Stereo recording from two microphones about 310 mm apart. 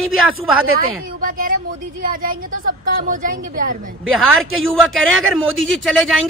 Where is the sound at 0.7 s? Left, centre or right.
Right.